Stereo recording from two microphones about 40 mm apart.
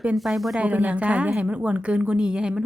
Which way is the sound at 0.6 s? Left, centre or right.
Right.